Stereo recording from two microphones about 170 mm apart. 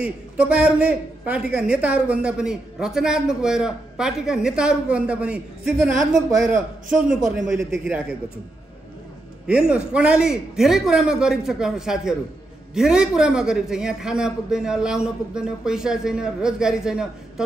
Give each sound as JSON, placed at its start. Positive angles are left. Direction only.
{"t": 0.0, "sound": "a man's voice", "side_deg": -5}
{"t": 7.2, "sound": "a man's voice", "side_deg": 0}
{"t": 9.5, "sound": "a man's voice", "side_deg": -5}